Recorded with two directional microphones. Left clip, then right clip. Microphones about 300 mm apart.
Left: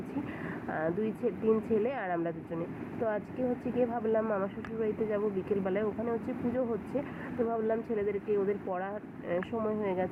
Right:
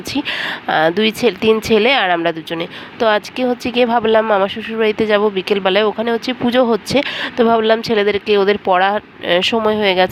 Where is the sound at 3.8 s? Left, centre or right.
Right.